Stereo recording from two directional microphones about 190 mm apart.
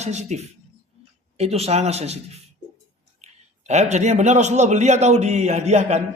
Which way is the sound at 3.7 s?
35° right (ahead or behind).